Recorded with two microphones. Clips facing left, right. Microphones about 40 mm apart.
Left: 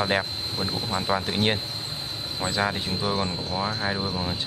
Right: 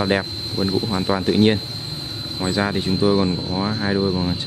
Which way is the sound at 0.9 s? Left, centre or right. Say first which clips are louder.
Right 3 dB; centre.